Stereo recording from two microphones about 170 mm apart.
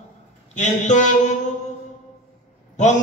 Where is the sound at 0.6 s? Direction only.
45° left (ahead or behind).